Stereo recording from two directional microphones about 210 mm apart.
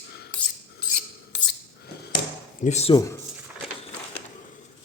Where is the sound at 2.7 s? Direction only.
30° left (ahead or behind).